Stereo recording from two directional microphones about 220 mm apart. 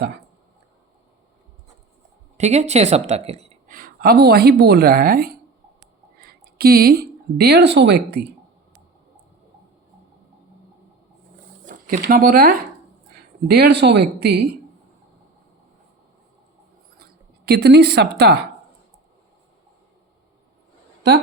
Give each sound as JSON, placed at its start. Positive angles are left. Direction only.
{"t": 2.4, "sound": "a woman's voice", "side_deg": -30}
{"t": 11.6, "sound": "speech", "side_deg": -35}
{"t": 17.4, "sound": "speech", "side_deg": -50}